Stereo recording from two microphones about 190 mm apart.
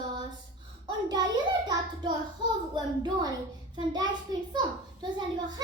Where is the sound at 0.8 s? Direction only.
20° right (ahead or behind).